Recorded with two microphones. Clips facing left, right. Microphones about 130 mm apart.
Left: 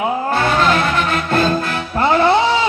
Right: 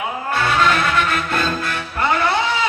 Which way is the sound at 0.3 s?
40° left (ahead or behind).